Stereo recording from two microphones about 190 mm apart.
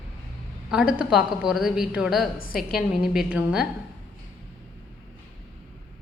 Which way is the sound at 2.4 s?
50° left (ahead or behind).